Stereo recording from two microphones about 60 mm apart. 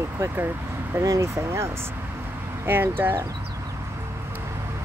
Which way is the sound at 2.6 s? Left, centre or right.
Right.